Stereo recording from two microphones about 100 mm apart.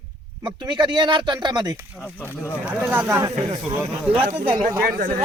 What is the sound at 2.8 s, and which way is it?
Speech, 25° right (ahead or behind).